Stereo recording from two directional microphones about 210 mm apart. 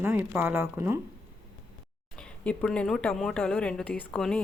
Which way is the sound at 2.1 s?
5° left (ahead or behind).